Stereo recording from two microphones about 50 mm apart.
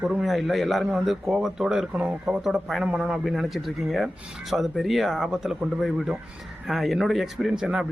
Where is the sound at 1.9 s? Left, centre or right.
Right.